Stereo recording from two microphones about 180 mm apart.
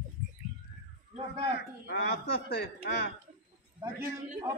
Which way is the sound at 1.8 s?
70° left (ahead or behind).